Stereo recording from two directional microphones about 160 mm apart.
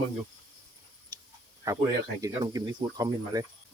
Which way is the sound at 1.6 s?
20° right (ahead or behind).